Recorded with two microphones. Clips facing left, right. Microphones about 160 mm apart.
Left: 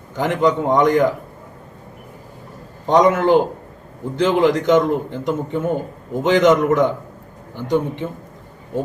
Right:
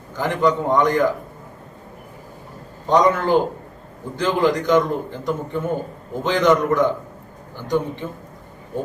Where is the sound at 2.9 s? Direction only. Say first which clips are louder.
Left 3 dB; 20° left (ahead or behind).